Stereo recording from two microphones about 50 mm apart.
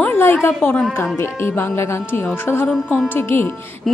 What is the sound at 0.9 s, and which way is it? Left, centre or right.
Speech, left.